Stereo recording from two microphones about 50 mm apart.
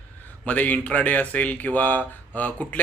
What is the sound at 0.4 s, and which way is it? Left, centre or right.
Speech, left.